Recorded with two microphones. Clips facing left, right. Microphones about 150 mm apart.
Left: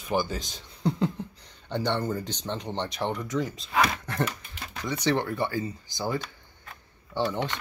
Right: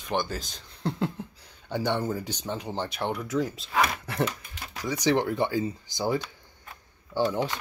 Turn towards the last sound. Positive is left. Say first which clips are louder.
# right 2 dB
turn(degrees=-10)  # may be behind; listen again after turning